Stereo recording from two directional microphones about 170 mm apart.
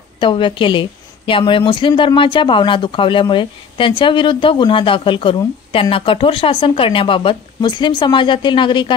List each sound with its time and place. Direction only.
0.2 s a woman's voice: 30° left (ahead or behind)